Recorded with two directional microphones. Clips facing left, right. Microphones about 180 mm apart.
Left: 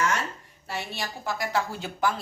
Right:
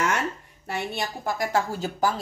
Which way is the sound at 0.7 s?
50° right (ahead or behind).